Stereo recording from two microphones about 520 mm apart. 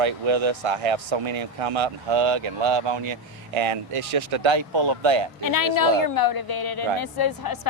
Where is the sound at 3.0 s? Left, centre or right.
Right.